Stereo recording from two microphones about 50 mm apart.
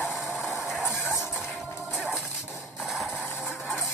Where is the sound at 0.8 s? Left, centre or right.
Left.